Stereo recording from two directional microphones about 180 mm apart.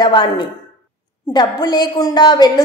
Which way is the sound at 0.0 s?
25° left (ahead or behind).